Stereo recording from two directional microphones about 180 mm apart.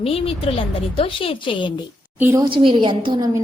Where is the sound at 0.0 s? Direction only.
30° left (ahead or behind).